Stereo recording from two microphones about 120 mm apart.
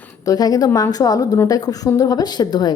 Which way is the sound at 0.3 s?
30° left (ahead or behind).